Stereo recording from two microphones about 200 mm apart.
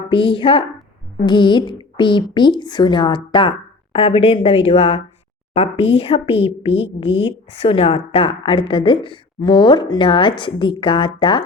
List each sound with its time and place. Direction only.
0.1 s a woman's voice: 25° left (ahead or behind)